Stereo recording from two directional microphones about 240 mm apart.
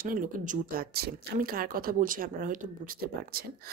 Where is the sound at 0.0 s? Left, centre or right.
Right.